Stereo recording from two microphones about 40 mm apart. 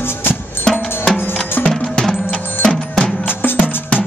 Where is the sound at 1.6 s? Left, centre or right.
Left.